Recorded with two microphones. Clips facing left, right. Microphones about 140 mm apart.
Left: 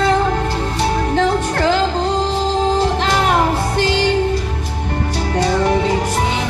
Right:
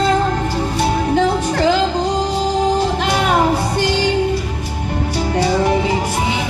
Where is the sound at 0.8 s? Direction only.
10° right (ahead or behind).